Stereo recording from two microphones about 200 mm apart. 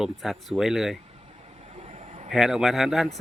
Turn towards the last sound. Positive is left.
turn(degrees=0)  # may be behind; listen again after turning